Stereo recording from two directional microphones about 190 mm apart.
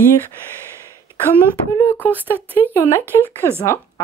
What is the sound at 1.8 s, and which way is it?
Speech, 10° left (ahead or behind).